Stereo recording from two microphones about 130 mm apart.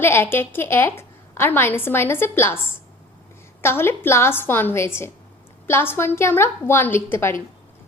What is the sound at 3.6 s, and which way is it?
A woman's voice, 20° left (ahead or behind).